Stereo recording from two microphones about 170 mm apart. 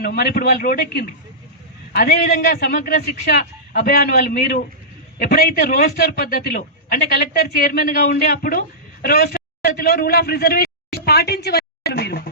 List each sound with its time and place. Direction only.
0.0 s a man's voice: 60° left (ahead or behind)